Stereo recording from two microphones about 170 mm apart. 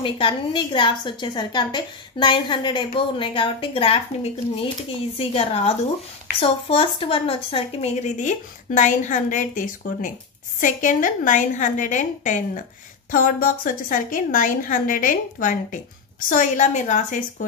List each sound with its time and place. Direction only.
0.0 s a woman's voice: 30° left (ahead or behind); by 17.5 s 45° left (ahead or behind)